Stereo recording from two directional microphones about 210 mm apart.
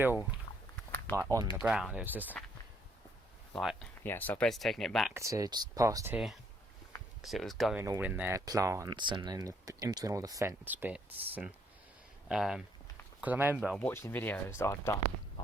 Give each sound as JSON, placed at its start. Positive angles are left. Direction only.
{"t": 0.9, "sound": "a sound", "side_deg": 10}
{"t": 1.1, "sound": "speech", "side_deg": -15}
{"t": 1.5, "sound": "speech", "side_deg": -5}
{"t": 3.5, "sound": "speech", "side_deg": 0}
{"t": 5.1, "sound": "speech", "side_deg": -15}
{"t": 7.2, "sound": "speech", "side_deg": 0}
{"t": 7.8, "sound": "speech", "side_deg": -10}